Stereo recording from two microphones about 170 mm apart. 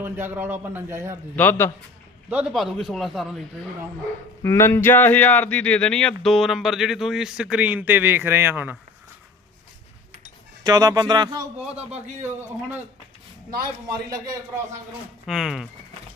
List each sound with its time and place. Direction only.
0.0 s a man's voice: 10° right (ahead or behind)
1.4 s a man's voice: 10° left (ahead or behind)
2.3 s speech: 5° right (ahead or behind)
4.4 s speech: 15° left (ahead or behind); by 8.8 s 10° right (ahead or behind)
10.6 s speech: 20° right (ahead or behind)
11.9 s a man's voice: 10° right (ahead or behind)
13.8 s speech: 20° right (ahead or behind)
15.3 s speech: centre (ahead or behind)